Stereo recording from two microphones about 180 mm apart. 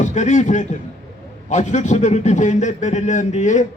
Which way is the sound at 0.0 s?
40° left (ahead or behind).